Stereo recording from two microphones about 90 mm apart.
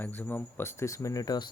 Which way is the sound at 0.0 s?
20° left (ahead or behind).